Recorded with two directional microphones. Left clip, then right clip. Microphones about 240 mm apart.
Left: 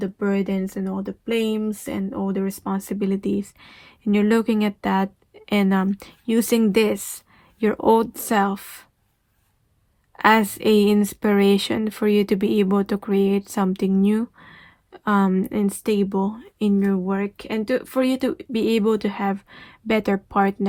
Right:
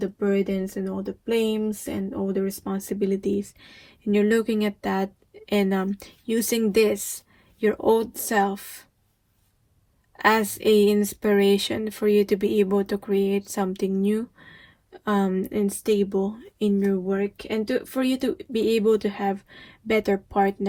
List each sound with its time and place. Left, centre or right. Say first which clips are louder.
0.2 s speech: even; left
10.2 s speech: left 4 dB; left